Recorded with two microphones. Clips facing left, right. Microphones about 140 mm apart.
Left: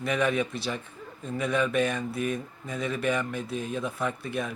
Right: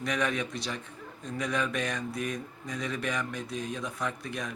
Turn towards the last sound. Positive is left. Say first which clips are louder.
# left 4 dB
turn(degrees=5)  # may be behind; listen again after turning